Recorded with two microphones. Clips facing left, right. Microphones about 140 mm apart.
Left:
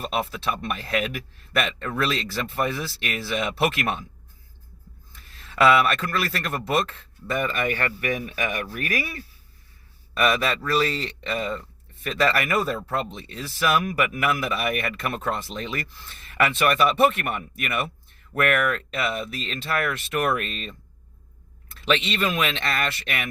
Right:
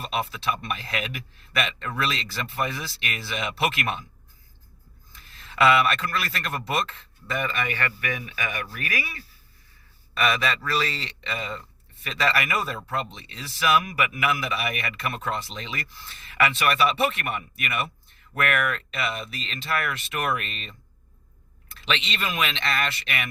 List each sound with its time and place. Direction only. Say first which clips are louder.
0.0 s a man's voice: left 1 dB; 45° left (ahead or behind)
5.5 s a man's voice: left 2 dB; 45° left (ahead or behind)
21.8 s a man's voice: left 5 dB; 45° left (ahead or behind)